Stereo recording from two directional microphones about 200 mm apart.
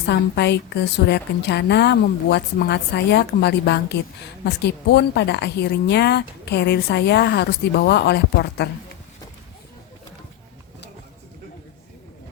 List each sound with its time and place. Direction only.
0.0 s a woman's voice: 55° left (ahead or behind)